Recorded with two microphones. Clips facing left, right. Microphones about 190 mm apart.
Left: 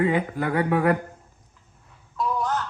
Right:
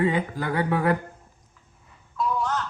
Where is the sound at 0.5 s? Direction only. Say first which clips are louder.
Left 2 dB; 30° right (ahead or behind).